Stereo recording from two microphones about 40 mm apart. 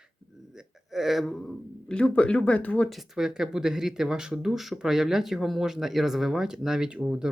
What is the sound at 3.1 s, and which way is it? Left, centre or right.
Speech, centre.